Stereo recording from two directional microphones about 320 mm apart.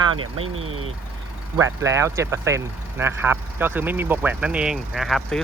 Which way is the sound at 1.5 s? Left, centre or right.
Centre.